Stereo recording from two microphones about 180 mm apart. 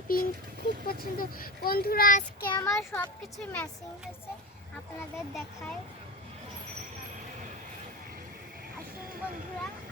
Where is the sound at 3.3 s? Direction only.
5° left (ahead or behind).